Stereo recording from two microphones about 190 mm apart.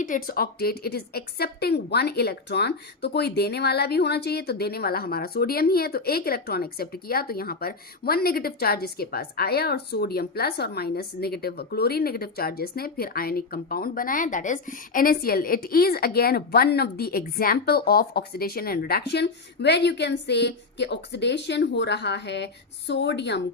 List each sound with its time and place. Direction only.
0.0 s speech: 50° left (ahead or behind); by 23.4 s 65° left (ahead or behind)